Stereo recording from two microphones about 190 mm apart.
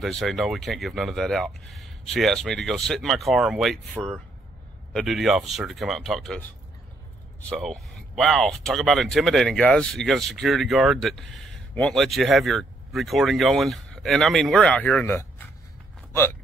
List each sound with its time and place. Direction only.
0.0 s speech: centre (ahead or behind)
7.4 s speech: 5° left (ahead or behind)